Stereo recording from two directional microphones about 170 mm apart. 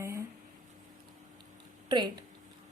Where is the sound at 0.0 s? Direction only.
15° right (ahead or behind).